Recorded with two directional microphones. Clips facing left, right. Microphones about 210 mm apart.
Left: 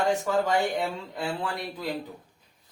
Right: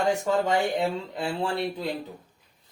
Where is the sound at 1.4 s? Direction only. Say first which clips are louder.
Right 5 dB; 30° right (ahead or behind).